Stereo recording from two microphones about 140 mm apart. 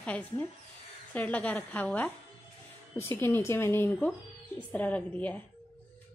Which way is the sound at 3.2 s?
20° left (ahead or behind).